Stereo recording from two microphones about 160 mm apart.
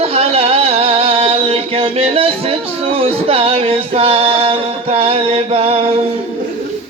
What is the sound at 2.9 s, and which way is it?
Music, 35° right (ahead or behind).